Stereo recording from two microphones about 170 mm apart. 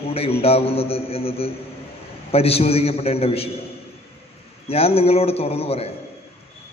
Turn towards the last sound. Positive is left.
turn(degrees=35)  # may be behind; listen again after turning